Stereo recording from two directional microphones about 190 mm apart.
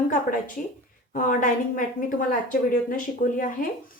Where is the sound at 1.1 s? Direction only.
45° left (ahead or behind).